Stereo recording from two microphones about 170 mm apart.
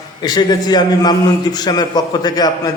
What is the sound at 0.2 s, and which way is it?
A man's voice, 25° left (ahead or behind).